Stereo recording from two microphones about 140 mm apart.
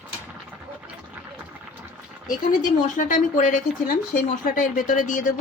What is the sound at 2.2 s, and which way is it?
Speech, 75° left (ahead or behind).